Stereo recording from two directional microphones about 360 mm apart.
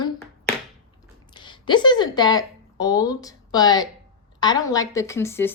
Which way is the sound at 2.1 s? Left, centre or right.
Centre.